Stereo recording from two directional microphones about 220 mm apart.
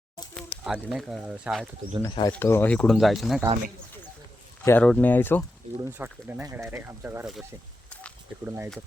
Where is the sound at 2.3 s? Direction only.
10° left (ahead or behind).